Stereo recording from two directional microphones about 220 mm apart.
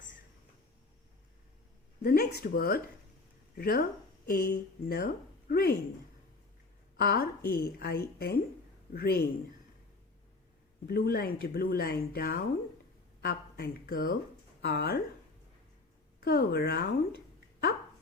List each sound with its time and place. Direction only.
2.0 s speech: 45° left (ahead or behind)
6.9 s speech: 45° left (ahead or behind)
10.8 s speech: 45° left (ahead or behind)
16.2 s speech: 45° left (ahead or behind)